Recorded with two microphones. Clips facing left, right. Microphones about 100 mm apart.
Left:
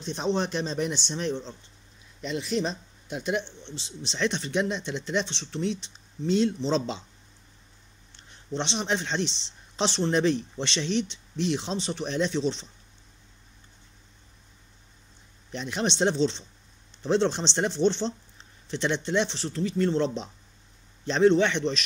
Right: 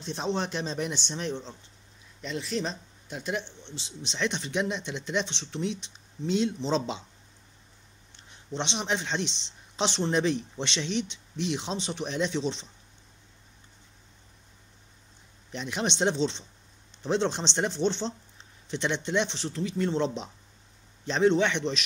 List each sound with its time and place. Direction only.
0.1 s speech: 5° right (ahead or behind)
2.2 s speech: 5° left (ahead or behind)
4.1 s speech: 10° right (ahead or behind)
8.5 s speech: 10° right (ahead or behind)
15.5 s speech: 5° right (ahead or behind)